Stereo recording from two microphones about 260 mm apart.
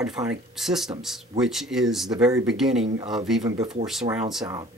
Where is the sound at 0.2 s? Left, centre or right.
Centre.